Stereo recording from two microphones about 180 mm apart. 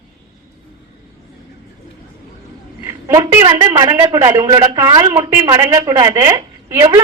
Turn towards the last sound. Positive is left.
turn(degrees=-20)  # may be behind; listen again after turning